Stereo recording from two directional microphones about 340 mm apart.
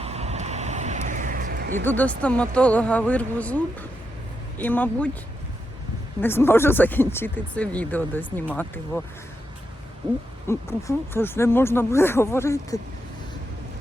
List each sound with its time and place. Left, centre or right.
0.0 s vehicle: centre
1.8 s speech: centre
6.2 s speech: centre
10.5 s speech: centre